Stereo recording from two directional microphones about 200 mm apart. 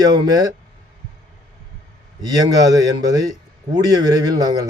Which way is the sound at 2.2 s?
20° right (ahead or behind).